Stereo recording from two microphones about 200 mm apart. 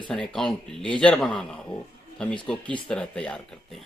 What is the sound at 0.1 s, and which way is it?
A man's voice, 5° left (ahead or behind).